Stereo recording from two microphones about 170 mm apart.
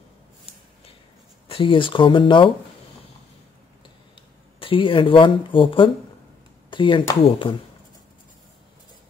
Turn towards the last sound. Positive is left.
turn(degrees=30)  # may be behind; listen again after turning